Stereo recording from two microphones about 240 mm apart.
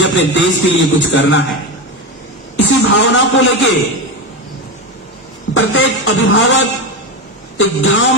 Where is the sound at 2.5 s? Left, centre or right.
Left.